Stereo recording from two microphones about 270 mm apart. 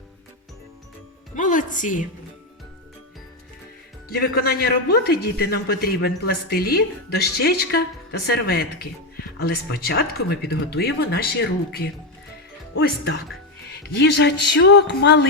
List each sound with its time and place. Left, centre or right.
1.4 s a woman's voice: left
4.1 s a man's voice: left